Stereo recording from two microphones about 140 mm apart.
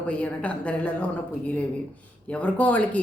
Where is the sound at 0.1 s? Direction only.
10° left (ahead or behind).